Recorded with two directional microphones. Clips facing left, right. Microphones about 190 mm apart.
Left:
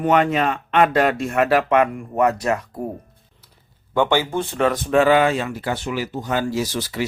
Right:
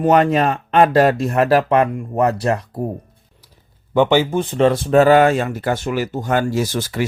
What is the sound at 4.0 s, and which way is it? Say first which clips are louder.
Speech: right 4 dB; 15° right (ahead or behind).